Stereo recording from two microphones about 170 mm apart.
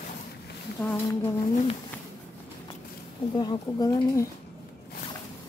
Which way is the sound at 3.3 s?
25° left (ahead or behind).